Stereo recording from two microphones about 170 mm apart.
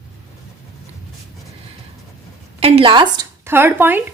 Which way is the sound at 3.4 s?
15° right (ahead or behind).